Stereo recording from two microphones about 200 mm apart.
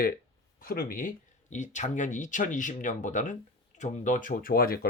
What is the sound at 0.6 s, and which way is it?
Speech, 45° left (ahead or behind).